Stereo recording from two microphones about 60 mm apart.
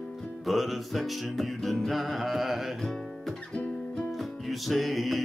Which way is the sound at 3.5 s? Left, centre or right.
Left.